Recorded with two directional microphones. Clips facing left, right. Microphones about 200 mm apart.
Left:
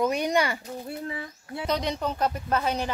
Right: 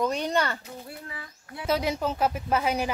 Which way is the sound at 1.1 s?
25° left (ahead or behind).